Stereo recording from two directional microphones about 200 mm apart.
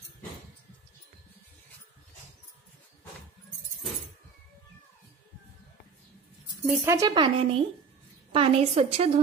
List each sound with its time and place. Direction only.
6.7 s a woman's voice: 10° right (ahead or behind); by 9.2 s 30° right (ahead or behind)